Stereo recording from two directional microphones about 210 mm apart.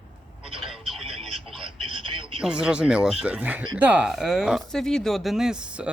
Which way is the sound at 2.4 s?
5° right (ahead or behind).